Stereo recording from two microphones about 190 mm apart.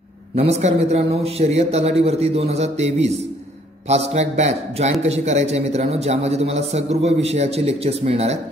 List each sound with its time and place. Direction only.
0.4 s a man's voice: 35° right (ahead or behind)